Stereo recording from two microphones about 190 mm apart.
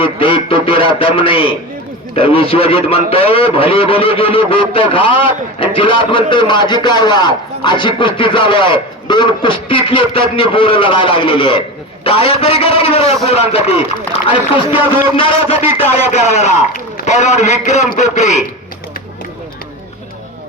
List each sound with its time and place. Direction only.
0.0 s a man's voice: 30° left (ahead or behind)